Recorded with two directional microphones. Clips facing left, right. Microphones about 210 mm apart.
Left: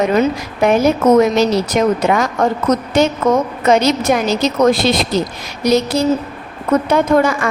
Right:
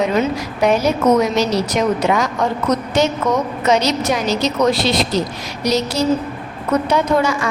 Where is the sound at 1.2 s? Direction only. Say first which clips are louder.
Left 4 dB; 50° left (ahead or behind).